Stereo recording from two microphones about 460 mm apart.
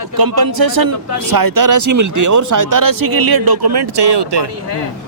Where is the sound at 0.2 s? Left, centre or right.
Right.